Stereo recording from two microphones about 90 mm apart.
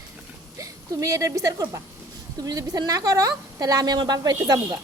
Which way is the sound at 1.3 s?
40° right (ahead or behind).